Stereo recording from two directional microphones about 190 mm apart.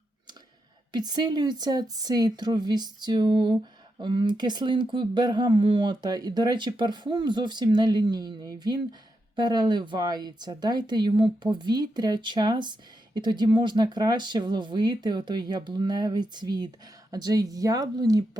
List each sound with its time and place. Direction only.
0.9 s speech: 20° right (ahead or behind)